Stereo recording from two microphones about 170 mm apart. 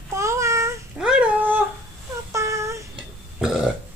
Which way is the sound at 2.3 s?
15° right (ahead or behind).